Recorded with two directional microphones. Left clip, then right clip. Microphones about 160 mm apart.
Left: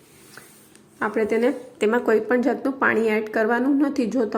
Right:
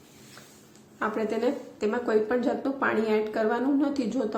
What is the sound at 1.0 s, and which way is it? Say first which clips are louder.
A woman's voice: left 6 dB; 30° left (ahead or behind).